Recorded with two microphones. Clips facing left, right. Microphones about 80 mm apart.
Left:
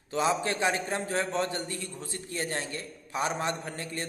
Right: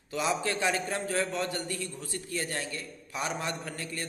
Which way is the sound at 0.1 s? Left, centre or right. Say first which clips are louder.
Left 2 dB; left.